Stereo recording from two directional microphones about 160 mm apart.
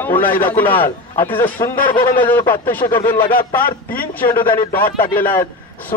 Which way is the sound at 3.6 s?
65° left (ahead or behind).